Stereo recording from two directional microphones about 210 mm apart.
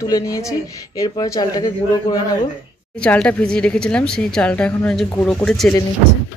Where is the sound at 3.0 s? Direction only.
5° left (ahead or behind).